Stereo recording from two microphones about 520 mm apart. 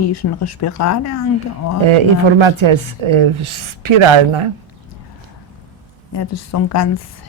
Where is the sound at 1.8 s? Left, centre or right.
Right.